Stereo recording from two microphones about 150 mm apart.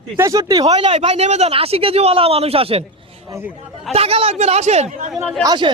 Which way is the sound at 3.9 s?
40° right (ahead or behind).